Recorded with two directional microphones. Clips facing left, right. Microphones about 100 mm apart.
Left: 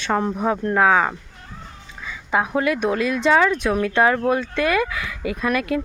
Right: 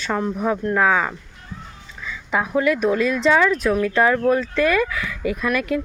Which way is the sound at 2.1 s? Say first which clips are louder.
Left 1 dB; 20° left (ahead or behind).